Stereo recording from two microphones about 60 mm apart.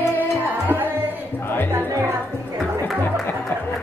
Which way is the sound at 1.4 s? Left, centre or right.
Left.